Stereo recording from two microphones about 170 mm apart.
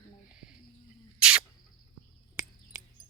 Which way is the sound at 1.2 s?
5° right (ahead or behind).